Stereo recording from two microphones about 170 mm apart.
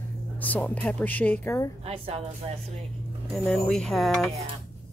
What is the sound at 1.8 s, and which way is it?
Speech, 35° right (ahead or behind).